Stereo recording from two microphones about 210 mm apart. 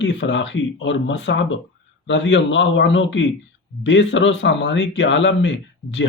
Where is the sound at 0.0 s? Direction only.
60° left (ahead or behind).